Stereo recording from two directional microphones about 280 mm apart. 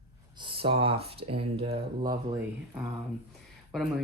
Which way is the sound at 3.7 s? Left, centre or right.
Centre.